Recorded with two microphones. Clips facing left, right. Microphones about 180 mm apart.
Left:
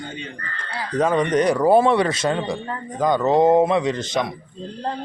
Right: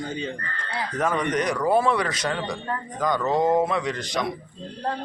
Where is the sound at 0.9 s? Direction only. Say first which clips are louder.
Left 6 dB; 20° left (ahead or behind).